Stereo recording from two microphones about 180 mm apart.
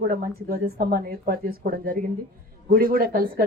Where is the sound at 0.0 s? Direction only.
55° right (ahead or behind).